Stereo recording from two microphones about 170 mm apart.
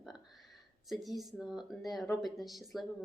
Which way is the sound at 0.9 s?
Centre (ahead or behind).